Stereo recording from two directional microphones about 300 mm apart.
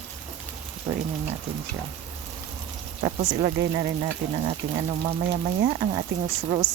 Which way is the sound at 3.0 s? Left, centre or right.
Centre.